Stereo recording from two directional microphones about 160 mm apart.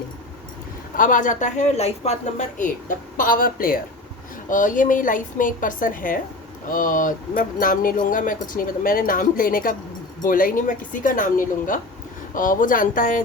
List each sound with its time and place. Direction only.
0.9 s speech: 55° left (ahead or behind)